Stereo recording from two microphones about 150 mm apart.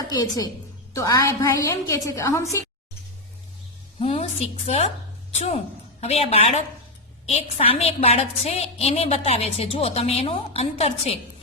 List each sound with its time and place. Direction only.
0.1 s a woman's voice: 25° left (ahead or behind)
4.0 s a woman's voice: 40° left (ahead or behind)
6.0 s a woman's voice: 45° left (ahead or behind)